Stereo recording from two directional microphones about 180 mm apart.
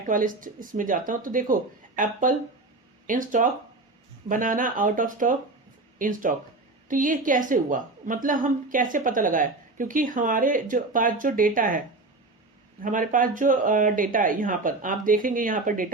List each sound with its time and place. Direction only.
0.0 s a woman's voice: 50° right (ahead or behind)
12.8 s a woman's voice: 45° right (ahead or behind)